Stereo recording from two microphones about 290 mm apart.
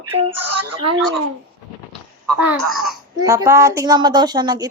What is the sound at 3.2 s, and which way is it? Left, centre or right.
A woman's voice, centre.